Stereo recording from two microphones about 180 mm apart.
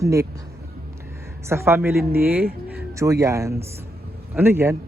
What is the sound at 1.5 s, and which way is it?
A man's voice, 15° right (ahead or behind).